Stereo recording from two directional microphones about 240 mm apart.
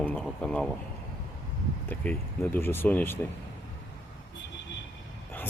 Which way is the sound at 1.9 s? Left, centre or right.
Centre.